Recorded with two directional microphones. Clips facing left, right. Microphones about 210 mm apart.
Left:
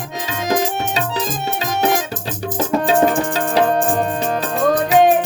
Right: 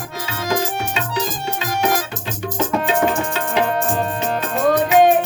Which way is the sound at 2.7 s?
35° left (ahead or behind).